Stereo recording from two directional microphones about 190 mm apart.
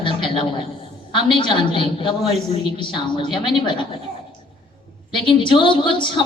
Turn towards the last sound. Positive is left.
turn(degrees=25)  # may be behind; listen again after turning